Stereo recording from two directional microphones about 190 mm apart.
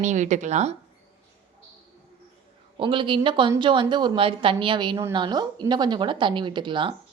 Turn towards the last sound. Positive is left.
turn(degrees=-25)  # may be behind; listen again after turning